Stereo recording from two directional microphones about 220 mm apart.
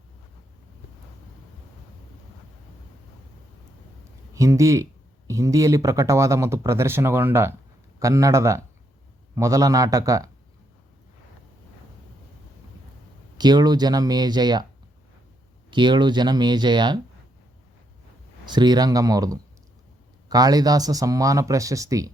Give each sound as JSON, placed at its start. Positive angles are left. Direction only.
{"t": 4.4, "sound": "speech", "side_deg": -15}
{"t": 13.4, "sound": "speech", "side_deg": -20}
{"t": 15.7, "sound": "speech", "side_deg": -20}
{"t": 18.4, "sound": "speech", "side_deg": -20}